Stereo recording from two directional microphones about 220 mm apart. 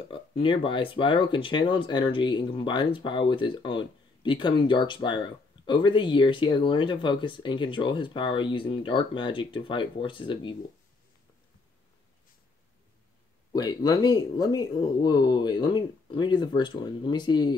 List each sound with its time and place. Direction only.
0.1 s speech: 25° left (ahead or behind)
13.5 s speech: 15° left (ahead or behind)